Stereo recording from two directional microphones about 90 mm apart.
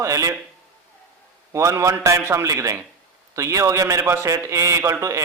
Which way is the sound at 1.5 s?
35° right (ahead or behind).